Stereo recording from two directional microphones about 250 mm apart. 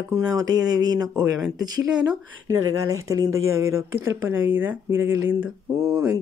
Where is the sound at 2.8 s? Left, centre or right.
Centre.